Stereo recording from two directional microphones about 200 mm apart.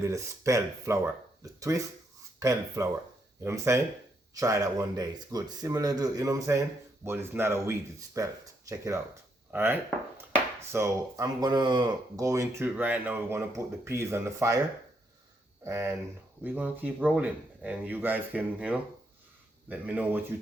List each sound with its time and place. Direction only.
0.0 s a man's voice: 15° right (ahead or behind)
9.5 s a man's voice: 10° right (ahead or behind)
15.6 s a man's voice: 15° right (ahead or behind)